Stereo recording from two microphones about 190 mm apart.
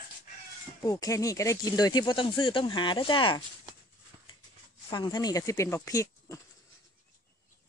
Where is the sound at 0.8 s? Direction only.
20° left (ahead or behind).